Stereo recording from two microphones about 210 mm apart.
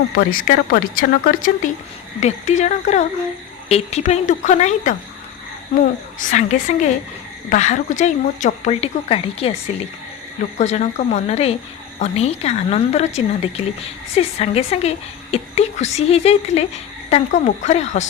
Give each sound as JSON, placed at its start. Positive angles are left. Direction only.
{"t": 0.1, "sound": "speech", "side_deg": 45}
{"t": 10.6, "sound": "a woman's voice", "side_deg": 35}